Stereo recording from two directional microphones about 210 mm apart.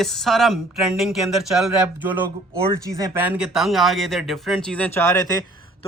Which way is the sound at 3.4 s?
Centre (ahead or behind).